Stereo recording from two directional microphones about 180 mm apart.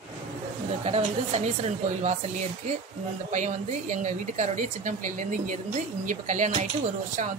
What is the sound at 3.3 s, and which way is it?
A woman's voice, 40° right (ahead or behind).